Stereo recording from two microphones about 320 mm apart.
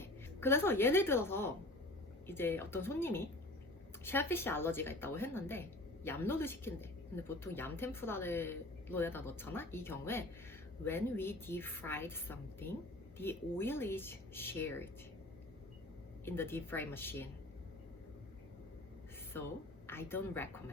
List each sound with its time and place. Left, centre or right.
0.0 s a woman's voice: centre
16.2 s a woman's voice: centre
19.9 s a woman's voice: centre